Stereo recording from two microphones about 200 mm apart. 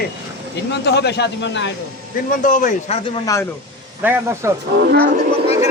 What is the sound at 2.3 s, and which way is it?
Speech, 40° left (ahead or behind).